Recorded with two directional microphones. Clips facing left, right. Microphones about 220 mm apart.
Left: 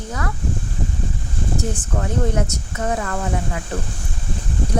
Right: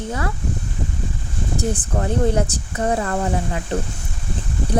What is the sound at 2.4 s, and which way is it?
Speech, 30° right (ahead or behind).